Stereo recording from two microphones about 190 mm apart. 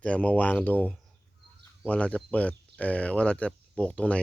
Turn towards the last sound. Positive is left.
turn(degrees=5)  # may be behind; listen again after turning